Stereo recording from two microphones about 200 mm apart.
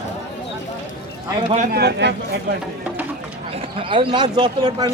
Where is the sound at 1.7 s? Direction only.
55° right (ahead or behind).